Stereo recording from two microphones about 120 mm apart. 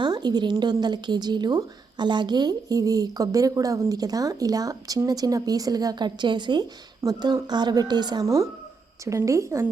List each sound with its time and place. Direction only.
0.0 s a woman's voice: 35° right (ahead or behind)